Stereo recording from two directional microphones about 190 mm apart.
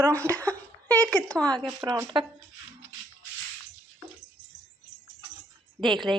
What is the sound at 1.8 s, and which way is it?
Speech, 20° right (ahead or behind).